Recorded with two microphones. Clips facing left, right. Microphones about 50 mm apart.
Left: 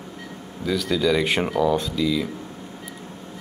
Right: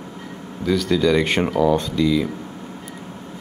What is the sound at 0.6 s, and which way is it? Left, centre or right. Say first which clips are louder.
Speech: right 4 dB; centre.